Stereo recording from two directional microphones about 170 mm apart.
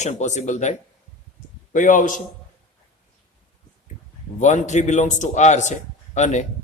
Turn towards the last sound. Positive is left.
turn(degrees=45)  # may be behind; listen again after turning